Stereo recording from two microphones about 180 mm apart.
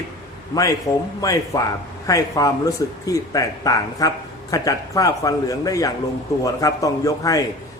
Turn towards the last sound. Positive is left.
turn(degrees=20)  # may be behind; listen again after turning